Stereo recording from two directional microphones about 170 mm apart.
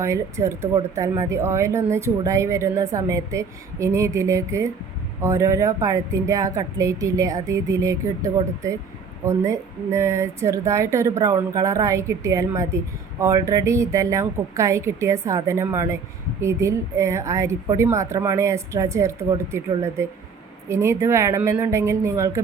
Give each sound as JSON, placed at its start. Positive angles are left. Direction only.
{"t": 0.0, "sound": "speech", "side_deg": -15}